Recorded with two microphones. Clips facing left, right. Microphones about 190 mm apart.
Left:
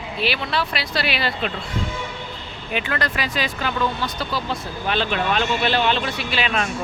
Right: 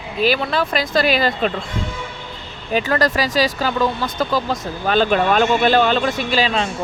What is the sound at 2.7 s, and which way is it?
Speech, 40° right (ahead or behind).